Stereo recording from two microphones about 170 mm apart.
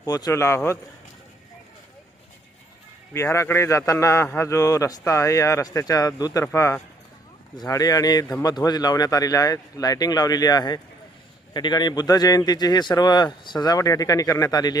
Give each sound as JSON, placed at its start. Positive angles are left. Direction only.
{"t": 0.0, "sound": "a man's voice", "side_deg": 20}
{"t": 3.1, "sound": "a man's voice", "side_deg": 15}